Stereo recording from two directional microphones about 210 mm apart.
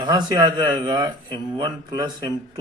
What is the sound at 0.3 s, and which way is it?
Speech, 20° right (ahead or behind).